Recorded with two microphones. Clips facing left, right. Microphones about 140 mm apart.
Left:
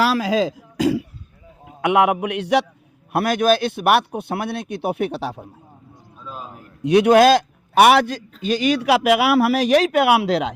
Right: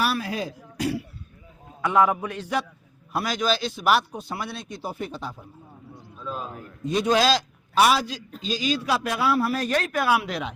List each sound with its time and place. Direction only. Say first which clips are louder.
0.0 s a man's voice: left 8 dB; 90° left
1.6 s a man's voice: left 4 dB; 70° left (ahead or behind)
3.1 s speech: left 8 dB; 60° left (ahead or behind)
6.2 s a man's voice: right 2 dB; 5° left (ahead or behind)
6.8 s a man's voice: left 9 dB; 70° left (ahead or behind); by 10.5 s 90° left